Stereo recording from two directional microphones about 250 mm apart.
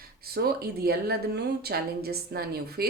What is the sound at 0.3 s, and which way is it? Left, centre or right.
A woman's voice, right.